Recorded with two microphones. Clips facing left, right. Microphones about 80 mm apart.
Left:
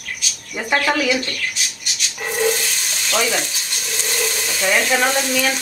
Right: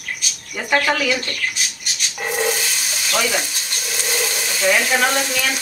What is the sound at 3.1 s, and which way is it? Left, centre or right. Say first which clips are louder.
Frying: left 1 dB; centre.